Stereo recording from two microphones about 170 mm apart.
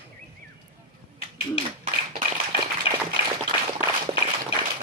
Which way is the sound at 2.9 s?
35° left (ahead or behind).